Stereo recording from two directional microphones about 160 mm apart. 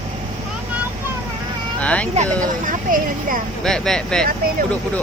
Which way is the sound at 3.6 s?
5° left (ahead or behind).